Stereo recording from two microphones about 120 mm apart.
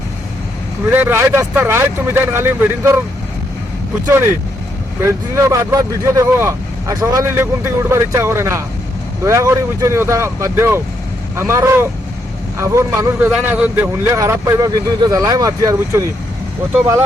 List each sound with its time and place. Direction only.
0.9 s speech: 20° right (ahead or behind)
4.9 s speech: 20° right (ahead or behind)